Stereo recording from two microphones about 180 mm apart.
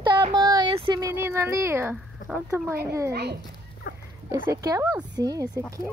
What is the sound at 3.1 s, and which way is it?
Speech, 65° right (ahead or behind).